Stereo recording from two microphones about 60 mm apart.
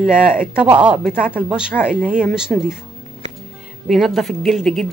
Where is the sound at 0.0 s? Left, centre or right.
Centre.